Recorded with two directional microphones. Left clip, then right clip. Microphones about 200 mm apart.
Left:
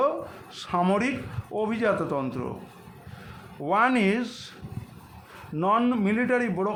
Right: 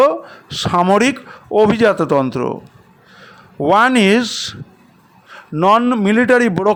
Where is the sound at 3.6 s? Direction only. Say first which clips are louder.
Right 11 dB; 45° right (ahead or behind).